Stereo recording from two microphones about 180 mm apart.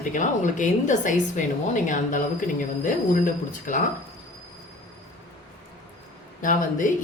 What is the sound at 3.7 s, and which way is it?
Speech, 45° left (ahead or behind).